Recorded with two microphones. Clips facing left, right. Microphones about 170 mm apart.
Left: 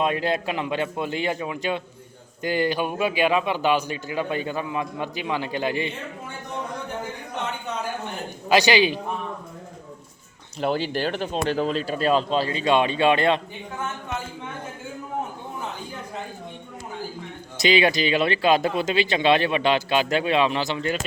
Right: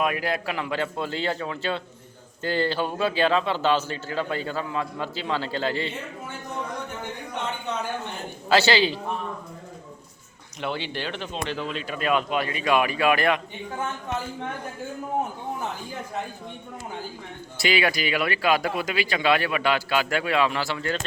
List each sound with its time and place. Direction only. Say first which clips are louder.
0.0 s a man's voice: left 2 dB; 25° left (ahead or behind)
8.4 s a man's voice: left 2 dB; 15° left (ahead or behind)
10.6 s speech: left 6 dB; 40° left (ahead or behind)
17.6 s speech: left 4 dB; 20° left (ahead or behind)